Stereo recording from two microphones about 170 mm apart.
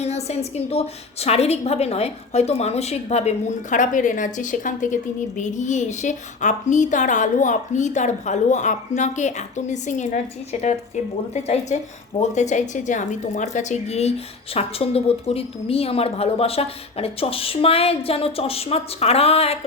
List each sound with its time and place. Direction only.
0.0 s a woman's voice: 40° left (ahead or behind)